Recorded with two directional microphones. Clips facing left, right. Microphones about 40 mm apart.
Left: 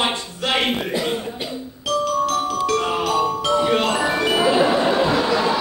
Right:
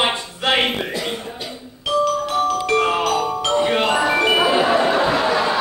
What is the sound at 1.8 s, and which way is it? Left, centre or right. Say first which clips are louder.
Glockenspiel: right 1 dB; centre.